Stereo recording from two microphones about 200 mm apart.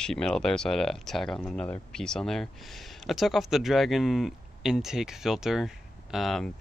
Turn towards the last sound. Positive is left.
turn(degrees=0)  # may be behind; listen again after turning